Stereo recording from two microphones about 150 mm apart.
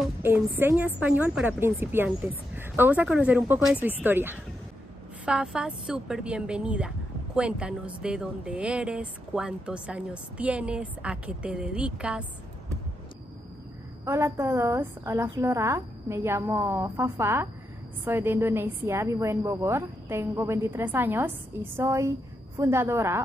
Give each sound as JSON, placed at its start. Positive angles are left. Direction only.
{"t": 0.6, "sound": "a woman's voice", "side_deg": -10}
{"t": 14.0, "sound": "a woman's voice", "side_deg": -15}